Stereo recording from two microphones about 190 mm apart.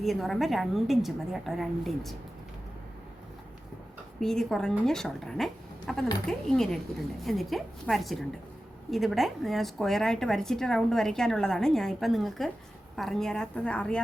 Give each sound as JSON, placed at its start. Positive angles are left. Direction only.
{"t": 0.0, "sound": "a woman's voice", "side_deg": 0}
{"t": 4.2, "sound": "a woman's voice", "side_deg": 0}